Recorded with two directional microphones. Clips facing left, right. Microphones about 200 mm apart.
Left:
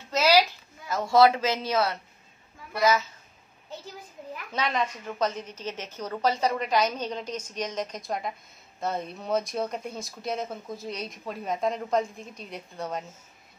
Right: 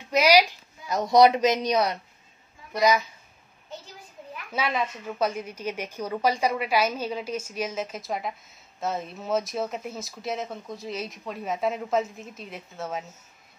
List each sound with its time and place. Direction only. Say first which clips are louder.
0.1 s a sound: right 2 dB; 15° right (ahead or behind)
2.7 s a child's voice: right 1 dB; 15° right (ahead or behind)
4.5 s a woman's voice: right 1 dB; 5° right (ahead or behind)